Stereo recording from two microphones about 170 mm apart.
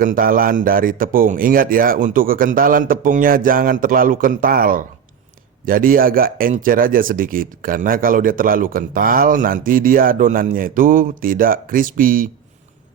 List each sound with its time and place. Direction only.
0.0 s speech: 55° right (ahead or behind)